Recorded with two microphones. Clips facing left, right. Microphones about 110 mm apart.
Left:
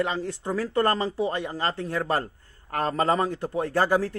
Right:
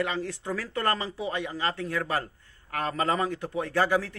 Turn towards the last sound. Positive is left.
turn(degrees=35)  # may be behind; listen again after turning